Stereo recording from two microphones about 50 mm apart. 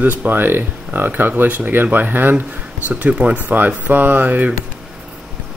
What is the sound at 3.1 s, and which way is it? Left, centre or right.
Speech, right.